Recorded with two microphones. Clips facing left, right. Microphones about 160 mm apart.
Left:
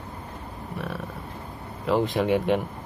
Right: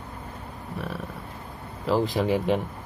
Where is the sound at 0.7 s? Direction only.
Centre (ahead or behind).